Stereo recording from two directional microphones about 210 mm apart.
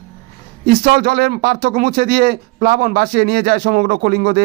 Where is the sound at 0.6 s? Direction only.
50° right (ahead or behind).